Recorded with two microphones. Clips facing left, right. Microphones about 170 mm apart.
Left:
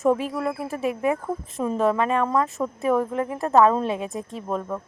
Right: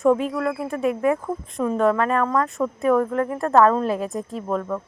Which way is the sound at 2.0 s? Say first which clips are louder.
Right 1 dB; 5° left (ahead or behind).